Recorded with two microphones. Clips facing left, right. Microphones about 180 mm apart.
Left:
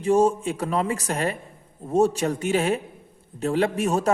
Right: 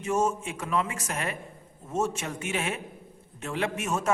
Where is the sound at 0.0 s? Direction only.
35° left (ahead or behind).